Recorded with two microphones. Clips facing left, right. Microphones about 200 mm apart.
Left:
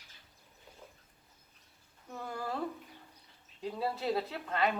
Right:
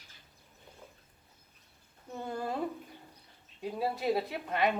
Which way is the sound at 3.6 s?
15° right (ahead or behind).